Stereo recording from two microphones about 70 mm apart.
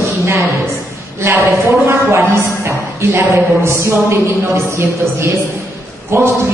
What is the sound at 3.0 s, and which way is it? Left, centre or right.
A man's voice, right.